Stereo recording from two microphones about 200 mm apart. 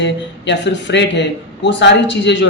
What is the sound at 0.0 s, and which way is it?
Speech, 60° left (ahead or behind).